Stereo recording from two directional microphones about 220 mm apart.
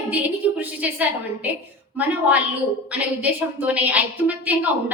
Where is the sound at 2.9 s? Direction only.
5° right (ahead or behind).